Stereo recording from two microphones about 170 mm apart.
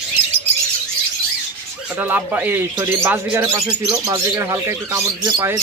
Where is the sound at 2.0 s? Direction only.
10° right (ahead or behind).